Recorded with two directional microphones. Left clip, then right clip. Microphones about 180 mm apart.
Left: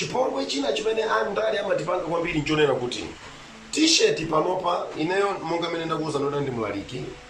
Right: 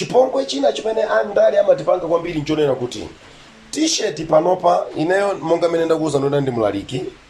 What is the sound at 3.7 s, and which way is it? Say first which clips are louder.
A man's voice: even; 40° right (ahead or behind).